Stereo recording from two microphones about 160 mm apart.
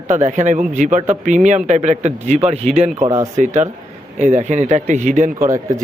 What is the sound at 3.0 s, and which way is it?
Speech, 20° right (ahead or behind).